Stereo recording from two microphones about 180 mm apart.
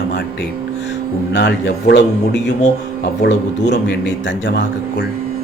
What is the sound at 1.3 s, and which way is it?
Speech, 80° left.